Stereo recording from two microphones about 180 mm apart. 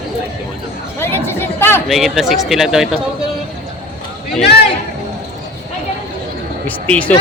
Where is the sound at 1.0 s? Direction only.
10° left (ahead or behind).